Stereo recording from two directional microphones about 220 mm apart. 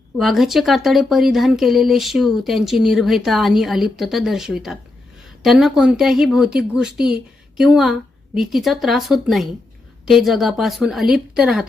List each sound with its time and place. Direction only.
0.2 s speech: centre (ahead or behind)